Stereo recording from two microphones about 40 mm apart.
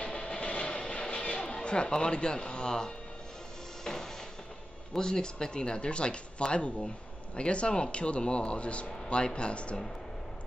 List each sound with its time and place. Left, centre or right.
0.0 s vehicle: left
0.8 s a sound: left
3.8 s music: centre
4.9 s speech: centre